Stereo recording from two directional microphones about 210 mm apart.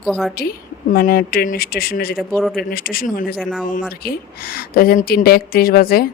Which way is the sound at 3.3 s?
Centre (ahead or behind).